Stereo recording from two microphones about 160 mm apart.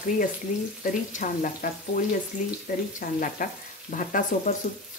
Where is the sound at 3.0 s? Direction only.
55° left (ahead or behind).